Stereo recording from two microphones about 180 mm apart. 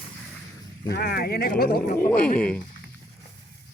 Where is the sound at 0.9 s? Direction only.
60° left (ahead or behind).